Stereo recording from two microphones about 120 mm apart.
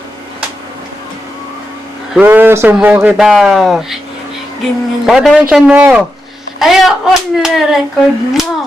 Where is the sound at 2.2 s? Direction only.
15° right (ahead or behind).